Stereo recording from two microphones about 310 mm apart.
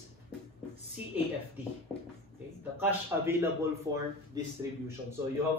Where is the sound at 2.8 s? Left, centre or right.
Centre.